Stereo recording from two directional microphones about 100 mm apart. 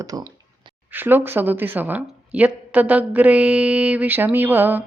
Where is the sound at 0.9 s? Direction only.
20° right (ahead or behind).